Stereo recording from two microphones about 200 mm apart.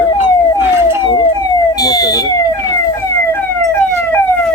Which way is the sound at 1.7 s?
20° left (ahead or behind).